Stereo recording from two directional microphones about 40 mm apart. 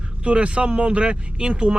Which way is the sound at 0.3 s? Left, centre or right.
Right.